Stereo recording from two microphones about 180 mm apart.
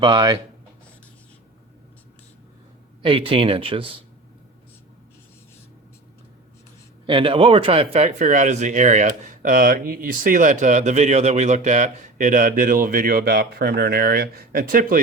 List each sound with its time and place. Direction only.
0.0 s speech: 25° right (ahead or behind)
3.0 s speech: 30° right (ahead or behind)
7.1 s speech: 30° right (ahead or behind); by 15.0 s 50° right (ahead or behind)